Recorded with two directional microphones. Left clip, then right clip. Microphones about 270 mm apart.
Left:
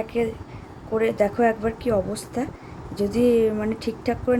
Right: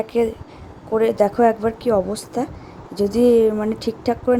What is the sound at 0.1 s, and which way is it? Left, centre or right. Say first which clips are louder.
A woman's voice: right 6 dB; right.